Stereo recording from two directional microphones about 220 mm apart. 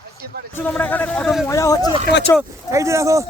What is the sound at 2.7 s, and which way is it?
Speech, 15° right (ahead or behind).